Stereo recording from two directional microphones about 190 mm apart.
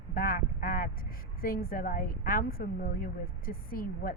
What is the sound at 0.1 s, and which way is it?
A woman's voice, 50° left (ahead or behind).